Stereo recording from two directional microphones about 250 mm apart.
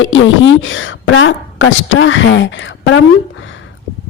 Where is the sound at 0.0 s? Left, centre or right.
Left.